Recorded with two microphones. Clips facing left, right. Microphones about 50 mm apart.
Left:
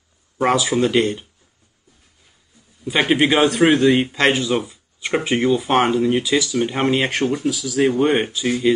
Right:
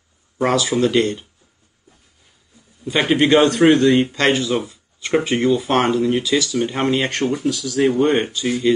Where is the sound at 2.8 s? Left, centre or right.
Centre.